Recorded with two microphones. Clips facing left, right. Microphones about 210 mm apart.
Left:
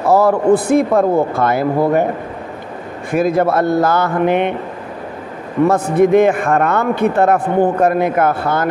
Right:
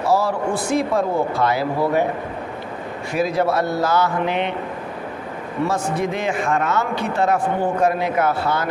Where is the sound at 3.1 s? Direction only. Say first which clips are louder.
Left 5 dB; 50° left (ahead or behind).